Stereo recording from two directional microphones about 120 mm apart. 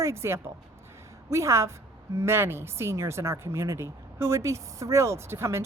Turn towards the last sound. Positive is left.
turn(degrees=-20)  # may be behind; listen again after turning